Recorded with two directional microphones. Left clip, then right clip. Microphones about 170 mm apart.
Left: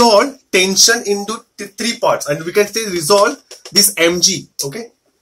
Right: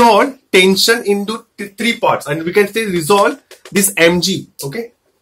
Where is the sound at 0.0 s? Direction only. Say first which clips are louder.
Right 1 dB; 30° right (ahead or behind).